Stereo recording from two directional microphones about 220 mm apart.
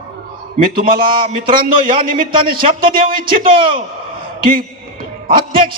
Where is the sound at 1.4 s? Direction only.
40° right (ahead or behind).